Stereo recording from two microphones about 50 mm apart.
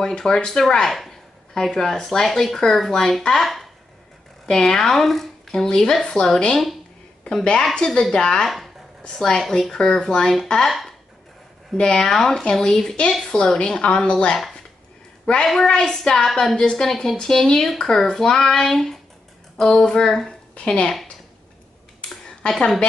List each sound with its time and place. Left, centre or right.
0.0 s a woman's voice: centre
7.2 s speech: centre
11.7 s speech: centre
15.4 s a woman's voice: centre
20.5 s a woman's voice: left
22.4 s speech: centre